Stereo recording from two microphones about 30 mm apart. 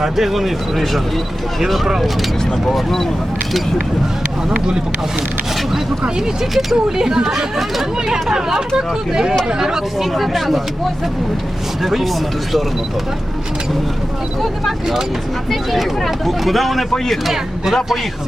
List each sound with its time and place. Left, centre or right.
0.0 s speech: centre
2.7 s speech: centre
4.4 s speech: right
6.4 s speech: centre
6.8 s speech: right
10.0 s speech: centre
11.8 s speech: centre
15.4 s speech: centre